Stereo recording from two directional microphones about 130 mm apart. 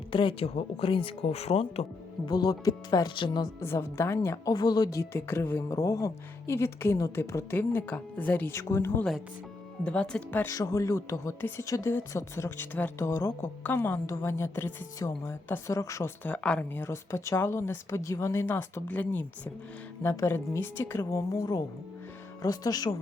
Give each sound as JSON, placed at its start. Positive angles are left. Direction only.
{"t": 0.1, "sound": "speech", "side_deg": 40}
{"t": 2.2, "sound": "speech", "side_deg": 30}
{"t": 3.6, "sound": "speech", "side_deg": 20}
{"t": 4.5, "sound": "speech", "side_deg": 30}
{"t": 9.8, "sound": "a woman's voice", "side_deg": 5}